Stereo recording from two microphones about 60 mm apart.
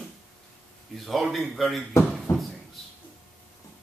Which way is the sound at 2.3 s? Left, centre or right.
Left.